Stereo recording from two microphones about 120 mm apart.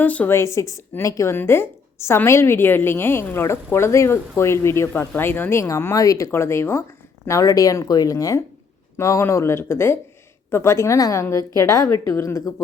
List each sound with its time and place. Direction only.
0.0 s a woman's voice: 15° left (ahead or behind)